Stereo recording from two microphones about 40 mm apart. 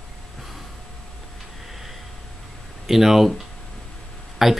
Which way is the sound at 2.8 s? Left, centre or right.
Centre.